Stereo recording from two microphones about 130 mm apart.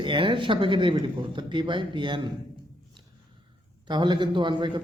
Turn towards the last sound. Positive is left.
turn(degrees=-35)  # may be behind; listen again after turning